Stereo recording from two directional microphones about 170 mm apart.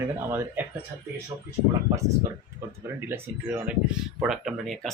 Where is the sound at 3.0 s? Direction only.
15° right (ahead or behind).